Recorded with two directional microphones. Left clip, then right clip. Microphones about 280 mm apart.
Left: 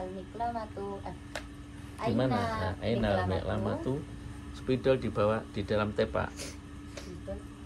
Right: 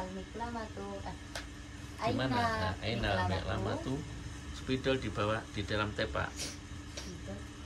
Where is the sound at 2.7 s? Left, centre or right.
Left.